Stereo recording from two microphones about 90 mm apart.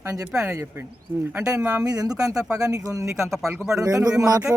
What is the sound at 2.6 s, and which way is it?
Speech, 40° right (ahead or behind).